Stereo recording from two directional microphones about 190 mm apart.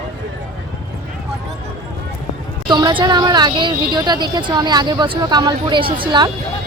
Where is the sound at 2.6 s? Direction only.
25° right (ahead or behind).